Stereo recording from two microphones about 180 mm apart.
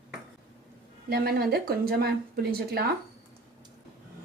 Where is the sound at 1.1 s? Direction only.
55° right (ahead or behind).